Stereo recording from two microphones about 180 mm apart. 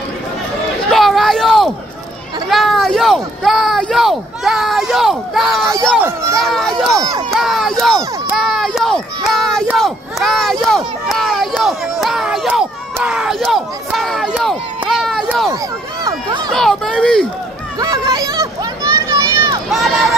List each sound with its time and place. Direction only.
0.8 s a sound: centre (ahead or behind)
2.5 s speech: centre (ahead or behind)
5.9 s speech: 15° right (ahead or behind)
6.3 s speech: centre (ahead or behind)
7.0 s speech: 20° right (ahead or behind)
7.2 s speech: centre (ahead or behind)
16.5 s speech: centre (ahead or behind)
17.7 s a sound: 20° right (ahead or behind)
19.7 s speech: centre (ahead or behind)